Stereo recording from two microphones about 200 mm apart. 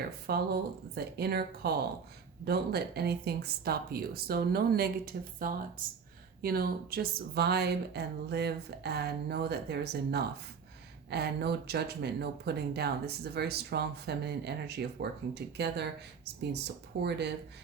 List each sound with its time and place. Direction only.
0.3 s a woman's voice: 50° right (ahead or behind)